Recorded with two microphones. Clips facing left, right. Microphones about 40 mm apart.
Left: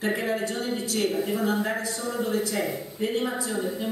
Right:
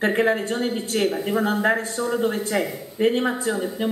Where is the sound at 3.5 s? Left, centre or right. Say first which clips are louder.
Right 2 dB; centre.